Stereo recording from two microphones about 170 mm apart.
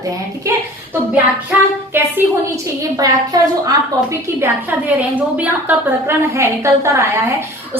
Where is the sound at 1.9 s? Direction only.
10° right (ahead or behind).